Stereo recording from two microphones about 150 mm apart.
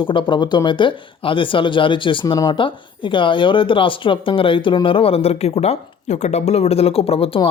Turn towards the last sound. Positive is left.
turn(degrees=40)  # may be behind; listen again after turning